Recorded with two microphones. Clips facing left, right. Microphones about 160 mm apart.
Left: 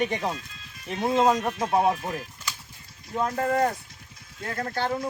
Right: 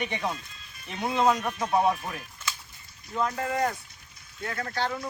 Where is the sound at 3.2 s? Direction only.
45° left (ahead or behind).